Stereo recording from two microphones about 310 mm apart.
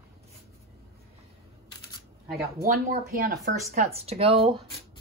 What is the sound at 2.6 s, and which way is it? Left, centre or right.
Speech, right.